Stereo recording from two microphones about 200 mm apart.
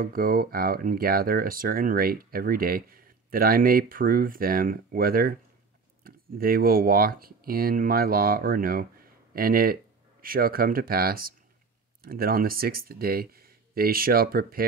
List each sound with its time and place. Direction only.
0.0 s speech: 45° right (ahead or behind)